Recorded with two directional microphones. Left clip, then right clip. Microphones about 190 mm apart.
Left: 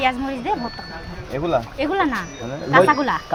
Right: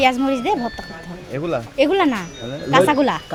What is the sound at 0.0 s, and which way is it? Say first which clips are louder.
Speech: right 4 dB; 55° right (ahead or behind).